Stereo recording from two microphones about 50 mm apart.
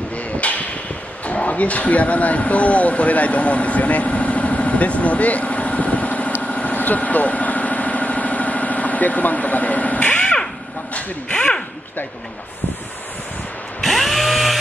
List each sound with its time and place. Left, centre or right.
0.4 s a sound: left
1.2 s speech: left
6.4 s vehicle: left
11.0 s speech: left
13.7 s drill: centre